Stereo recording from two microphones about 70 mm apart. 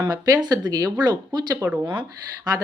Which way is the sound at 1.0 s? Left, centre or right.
Right.